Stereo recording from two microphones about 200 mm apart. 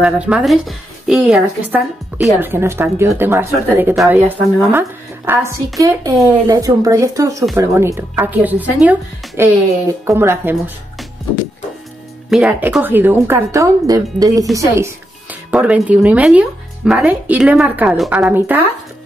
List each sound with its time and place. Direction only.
0.0 s speech: 5° right (ahead or behind)
12.3 s speech: 5° right (ahead or behind)